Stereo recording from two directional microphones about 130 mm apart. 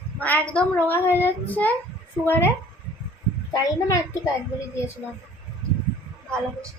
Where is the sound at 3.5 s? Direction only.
25° left (ahead or behind).